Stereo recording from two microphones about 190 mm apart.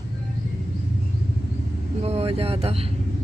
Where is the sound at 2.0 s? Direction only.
30° right (ahead or behind).